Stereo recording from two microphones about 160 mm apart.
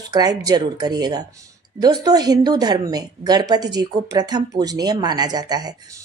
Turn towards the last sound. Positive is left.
turn(degrees=-25)  # may be behind; listen again after turning